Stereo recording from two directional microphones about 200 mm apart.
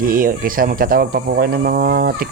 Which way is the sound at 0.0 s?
45° right (ahead or behind).